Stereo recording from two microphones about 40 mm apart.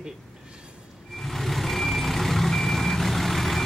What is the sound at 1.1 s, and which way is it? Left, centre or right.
Vehicle, centre.